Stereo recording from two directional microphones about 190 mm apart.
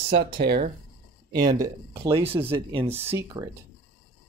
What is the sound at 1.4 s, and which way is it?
Speech, 20° right (ahead or behind).